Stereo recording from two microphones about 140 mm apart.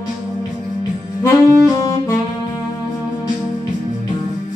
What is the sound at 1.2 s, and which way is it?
Saxophone, 20° left (ahead or behind).